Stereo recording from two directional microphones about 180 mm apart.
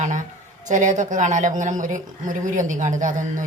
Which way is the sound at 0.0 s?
45° right (ahead or behind).